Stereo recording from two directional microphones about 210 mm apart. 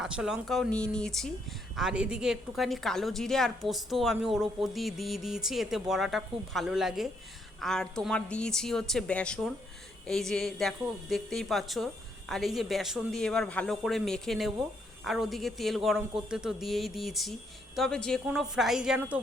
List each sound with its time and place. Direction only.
0.0 s a woman's voice: 5° right (ahead or behind)